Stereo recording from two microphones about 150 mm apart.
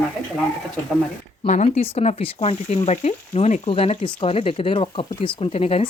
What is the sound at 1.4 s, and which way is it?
Speech, 50° left (ahead or behind).